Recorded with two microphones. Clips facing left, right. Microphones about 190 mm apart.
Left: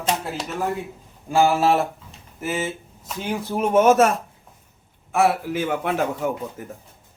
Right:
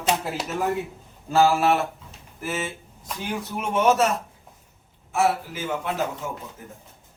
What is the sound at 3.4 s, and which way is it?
Speech, 35° left (ahead or behind).